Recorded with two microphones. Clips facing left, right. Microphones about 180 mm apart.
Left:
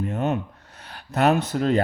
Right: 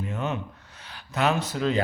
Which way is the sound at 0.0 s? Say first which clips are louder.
Left 5 dB; 50° left (ahead or behind).